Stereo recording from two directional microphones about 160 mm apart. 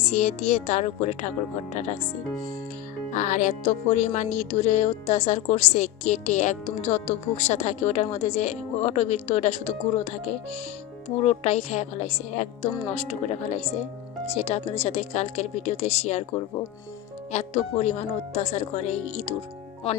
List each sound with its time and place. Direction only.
0.1 s speech: 45° left (ahead or behind)
3.1 s speech: 50° left (ahead or behind)